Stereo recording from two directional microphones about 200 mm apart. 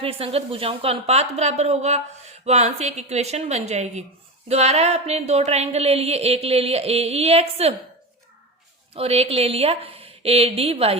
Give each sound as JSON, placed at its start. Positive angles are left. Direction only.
{"t": 0.0, "sound": "a woman's voice", "side_deg": -30}
{"t": 9.0, "sound": "a woman's voice", "side_deg": -30}